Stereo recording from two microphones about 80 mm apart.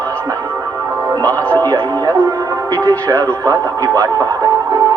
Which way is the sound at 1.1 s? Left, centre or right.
Right.